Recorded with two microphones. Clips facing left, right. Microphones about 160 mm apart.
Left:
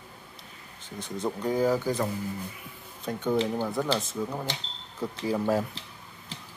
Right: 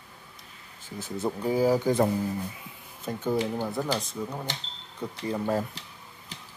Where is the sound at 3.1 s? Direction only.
5° right (ahead or behind).